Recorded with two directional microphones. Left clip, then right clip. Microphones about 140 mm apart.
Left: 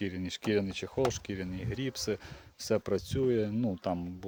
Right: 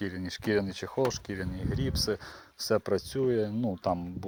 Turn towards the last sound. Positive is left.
turn(degrees=15)  # may be behind; listen again after turning